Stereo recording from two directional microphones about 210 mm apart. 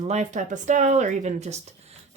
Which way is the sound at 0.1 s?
35° right (ahead or behind).